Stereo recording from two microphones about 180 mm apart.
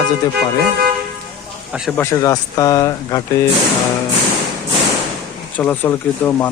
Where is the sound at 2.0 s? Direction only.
15° left (ahead or behind).